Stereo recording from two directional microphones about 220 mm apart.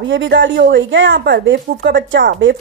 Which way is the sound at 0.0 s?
55° right (ahead or behind).